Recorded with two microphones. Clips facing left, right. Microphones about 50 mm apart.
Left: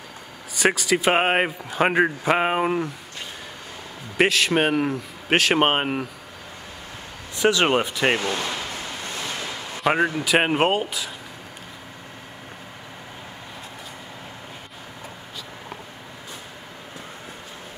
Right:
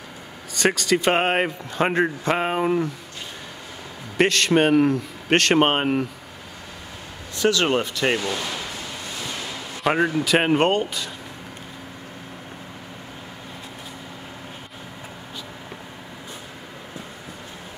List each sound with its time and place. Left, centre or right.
0.6 s a man's voice: centre
4.2 s a man's voice: centre
7.3 s speech: centre
9.8 s a man's voice: centre